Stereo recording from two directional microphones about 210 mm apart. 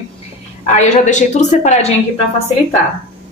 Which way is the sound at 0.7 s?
35° left (ahead or behind).